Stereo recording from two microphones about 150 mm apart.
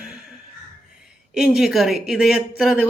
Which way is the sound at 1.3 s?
Centre (ahead or behind).